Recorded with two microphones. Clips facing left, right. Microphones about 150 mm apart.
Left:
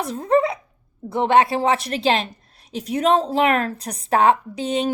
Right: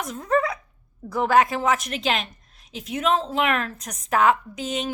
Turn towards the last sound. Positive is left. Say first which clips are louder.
# left 6 dB
turn(degrees=35)  # may be behind; listen again after turning